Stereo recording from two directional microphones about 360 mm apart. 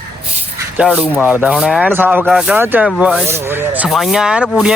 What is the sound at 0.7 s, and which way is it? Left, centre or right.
Speech, centre.